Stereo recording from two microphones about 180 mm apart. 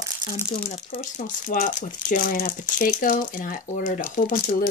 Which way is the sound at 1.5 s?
45° left (ahead or behind).